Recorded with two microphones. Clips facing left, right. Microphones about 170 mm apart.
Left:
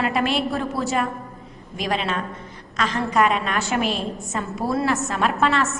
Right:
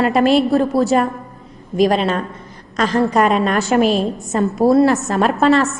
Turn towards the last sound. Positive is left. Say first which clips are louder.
# right 7 dB
turn(degrees=-35)  # may be behind; listen again after turning